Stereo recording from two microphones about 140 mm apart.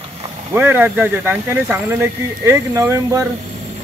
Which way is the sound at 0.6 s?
15° right (ahead or behind).